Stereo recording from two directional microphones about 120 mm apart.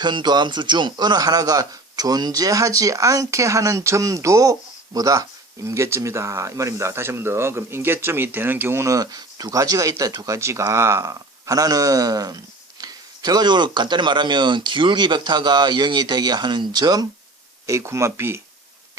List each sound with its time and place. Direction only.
0.0 s a man's voice: 40° right (ahead or behind); by 18.3 s 20° right (ahead or behind)